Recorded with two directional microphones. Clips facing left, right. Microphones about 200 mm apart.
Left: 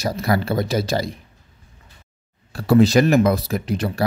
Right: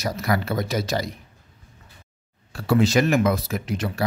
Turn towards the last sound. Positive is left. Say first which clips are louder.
# left 4 dB
turn(degrees=35)  # may be behind; listen again after turning